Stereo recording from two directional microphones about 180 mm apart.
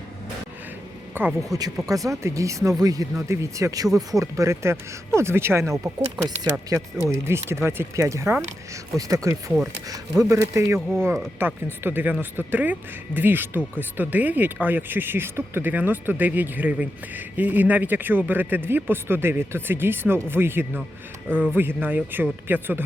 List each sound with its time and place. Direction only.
1.1 s speech: 10° right (ahead or behind)